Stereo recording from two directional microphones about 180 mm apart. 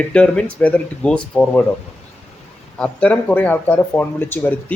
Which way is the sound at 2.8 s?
10° left (ahead or behind).